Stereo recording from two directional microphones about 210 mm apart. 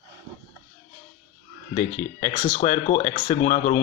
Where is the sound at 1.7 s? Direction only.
35° left (ahead or behind).